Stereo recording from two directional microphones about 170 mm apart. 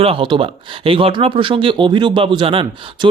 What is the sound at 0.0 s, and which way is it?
Speech, 30° right (ahead or behind).